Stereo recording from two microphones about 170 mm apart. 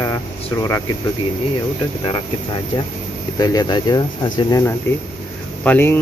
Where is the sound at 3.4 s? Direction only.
20° left (ahead or behind).